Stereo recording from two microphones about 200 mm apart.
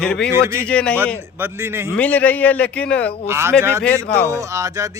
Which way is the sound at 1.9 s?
10° left (ahead or behind).